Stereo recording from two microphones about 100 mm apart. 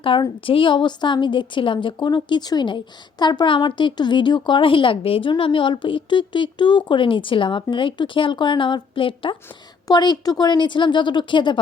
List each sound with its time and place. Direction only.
0.0 s a woman's voice: 60° left (ahead or behind)
9.8 s a woman's voice: 45° left (ahead or behind)